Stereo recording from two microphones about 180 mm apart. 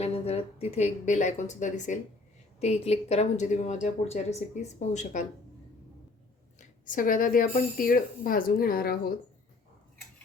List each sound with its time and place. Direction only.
0.0 s speech: 35° left (ahead or behind)
6.6 s speech: 45° left (ahead or behind)